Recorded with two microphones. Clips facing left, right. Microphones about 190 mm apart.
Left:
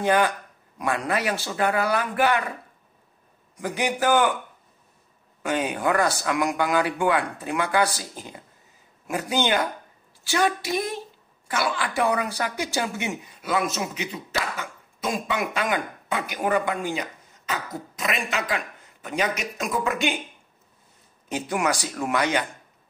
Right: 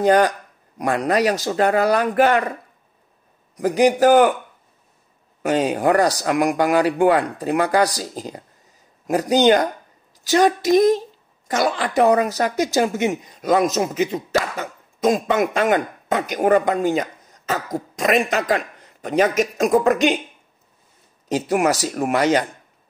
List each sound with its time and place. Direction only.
0.0 s speech: 40° right (ahead or behind)
3.5 s speech: 35° right (ahead or behind)
5.5 s speech: 35° right (ahead or behind)
21.3 s speech: 35° right (ahead or behind)